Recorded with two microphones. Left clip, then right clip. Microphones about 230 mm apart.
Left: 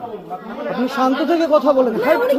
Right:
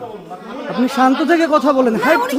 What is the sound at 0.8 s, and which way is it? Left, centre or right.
A man's voice, right.